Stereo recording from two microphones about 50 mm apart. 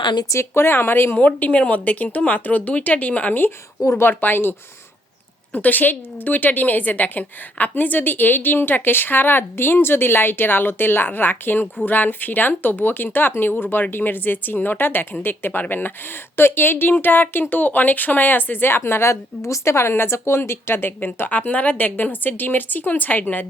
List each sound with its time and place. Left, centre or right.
0.5 s a woman's voice: left
1.1 s a woman's voice: left
18.9 s a woman's voice: left
19.1 s speech: left
20.4 s a woman's voice: left
21.2 s speech: left